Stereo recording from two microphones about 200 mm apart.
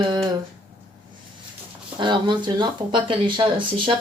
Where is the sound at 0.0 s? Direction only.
20° right (ahead or behind).